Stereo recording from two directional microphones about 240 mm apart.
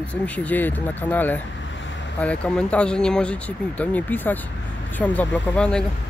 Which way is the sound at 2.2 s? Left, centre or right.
Centre.